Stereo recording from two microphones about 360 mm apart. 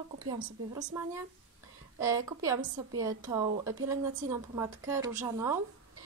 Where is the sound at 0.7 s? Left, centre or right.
Centre.